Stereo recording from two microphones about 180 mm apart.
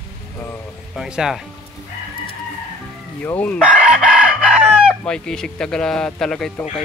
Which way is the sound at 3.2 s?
10° left (ahead or behind).